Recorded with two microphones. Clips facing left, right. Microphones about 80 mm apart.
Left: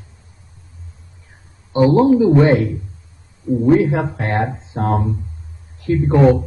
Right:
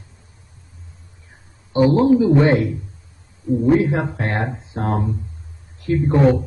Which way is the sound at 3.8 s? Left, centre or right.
Left.